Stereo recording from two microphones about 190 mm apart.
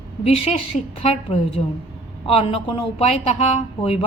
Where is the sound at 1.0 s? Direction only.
35° left (ahead or behind).